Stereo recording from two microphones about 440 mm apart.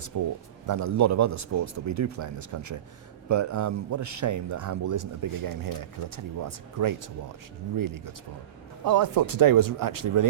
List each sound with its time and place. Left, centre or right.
0.1 s a man's voice: right